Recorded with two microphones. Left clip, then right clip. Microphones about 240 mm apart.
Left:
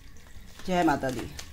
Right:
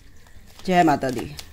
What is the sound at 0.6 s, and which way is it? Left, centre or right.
Speech, right.